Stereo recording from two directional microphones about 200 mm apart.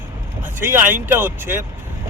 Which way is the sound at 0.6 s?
10° right (ahead or behind).